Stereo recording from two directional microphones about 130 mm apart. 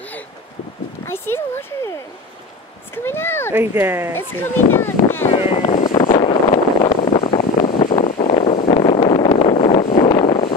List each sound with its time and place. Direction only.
1.0 s speech: 15° left (ahead or behind)
3.1 s speech: 15° left (ahead or behind)
3.5 s speech: 15° right (ahead or behind)
4.1 s speech: 15° left (ahead or behind)
5.3 s speech: 50° left (ahead or behind)
5.9 s wind noise: 35° left (ahead or behind)
7.8 s a sound: 45° left (ahead or behind)
8.6 s vehicle: 45° left (ahead or behind)